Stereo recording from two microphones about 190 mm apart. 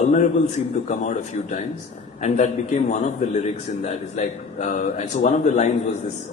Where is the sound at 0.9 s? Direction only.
40° left (ahead or behind).